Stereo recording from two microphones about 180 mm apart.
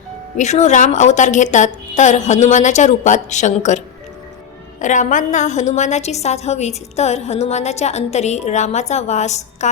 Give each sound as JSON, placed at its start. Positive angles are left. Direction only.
{"t": 0.3, "sound": "a woman's voice", "side_deg": 40}